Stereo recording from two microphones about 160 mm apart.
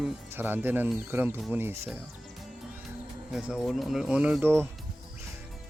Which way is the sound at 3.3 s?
5° right (ahead or behind).